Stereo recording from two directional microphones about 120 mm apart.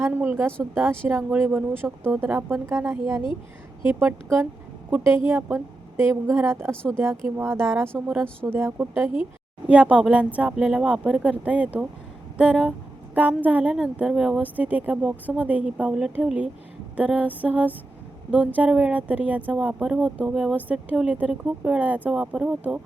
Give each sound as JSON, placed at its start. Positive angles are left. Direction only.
{"t": 0.0, "sound": "a woman's voice", "side_deg": -15}
{"t": 4.9, "sound": "a woman's voice", "side_deg": -15}